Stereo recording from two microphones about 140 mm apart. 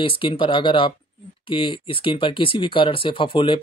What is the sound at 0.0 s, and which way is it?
Speech, 40° left (ahead or behind).